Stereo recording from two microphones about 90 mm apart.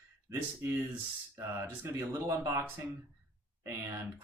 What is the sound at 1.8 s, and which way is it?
Speech, 30° right (ahead or behind).